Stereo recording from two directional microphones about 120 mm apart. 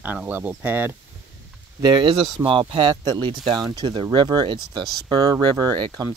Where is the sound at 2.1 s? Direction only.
50° right (ahead or behind).